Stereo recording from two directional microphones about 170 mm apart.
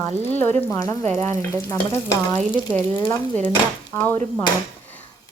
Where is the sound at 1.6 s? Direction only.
20° left (ahead or behind).